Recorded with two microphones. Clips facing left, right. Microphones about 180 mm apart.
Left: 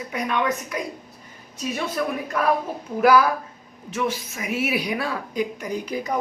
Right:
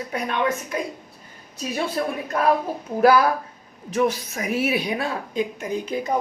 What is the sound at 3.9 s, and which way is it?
A woman's voice, 40° right (ahead or behind).